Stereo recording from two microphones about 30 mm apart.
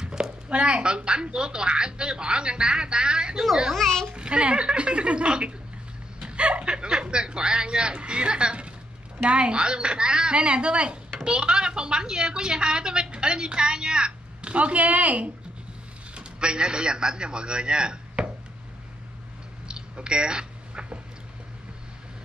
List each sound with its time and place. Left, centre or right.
0.0 s a sound: right
0.5 s a woman's voice: right
3.7 s a child's voice: centre
4.1 s a woman's voice: right
6.1 s chuckle: right
6.7 s a woman's voice: right
16.2 s speech: right
19.7 s a sound: right